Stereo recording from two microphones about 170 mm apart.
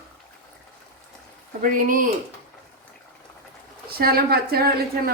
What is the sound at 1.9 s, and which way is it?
Speech, 55° right (ahead or behind).